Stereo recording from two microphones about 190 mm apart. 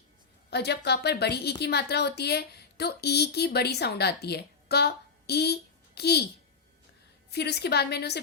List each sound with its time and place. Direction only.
0.5 s a woman's voice: 60° left (ahead or behind)
7.3 s a woman's voice: 60° left (ahead or behind)